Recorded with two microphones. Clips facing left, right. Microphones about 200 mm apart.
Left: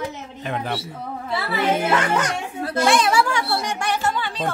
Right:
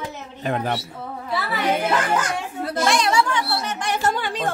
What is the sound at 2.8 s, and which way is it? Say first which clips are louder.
Speech: left 2 dB; 5° left (ahead or behind).